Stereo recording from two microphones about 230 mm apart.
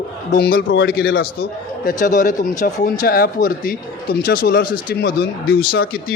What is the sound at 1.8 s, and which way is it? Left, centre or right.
A man's voice, left.